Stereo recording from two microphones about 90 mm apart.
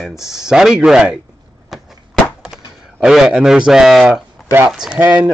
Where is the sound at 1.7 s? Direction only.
5° right (ahead or behind).